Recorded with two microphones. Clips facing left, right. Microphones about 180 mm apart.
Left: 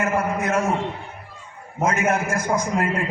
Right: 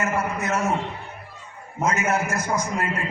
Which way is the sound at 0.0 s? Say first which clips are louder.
Left 3 dB; 55° left (ahead or behind).